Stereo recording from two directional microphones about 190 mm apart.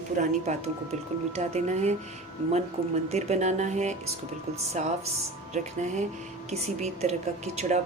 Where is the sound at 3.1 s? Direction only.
35° right (ahead or behind).